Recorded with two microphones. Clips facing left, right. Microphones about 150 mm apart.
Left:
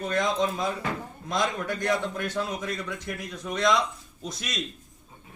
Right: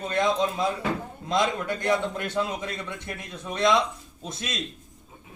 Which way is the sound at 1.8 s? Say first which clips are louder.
Right 2 dB; 25° right (ahead or behind).